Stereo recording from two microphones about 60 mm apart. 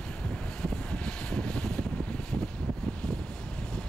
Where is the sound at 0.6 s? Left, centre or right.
Centre.